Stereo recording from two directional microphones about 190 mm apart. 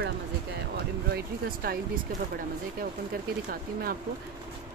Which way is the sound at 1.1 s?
55° right (ahead or behind).